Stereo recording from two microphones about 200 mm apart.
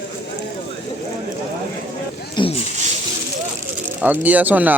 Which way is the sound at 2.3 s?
25° left (ahead or behind).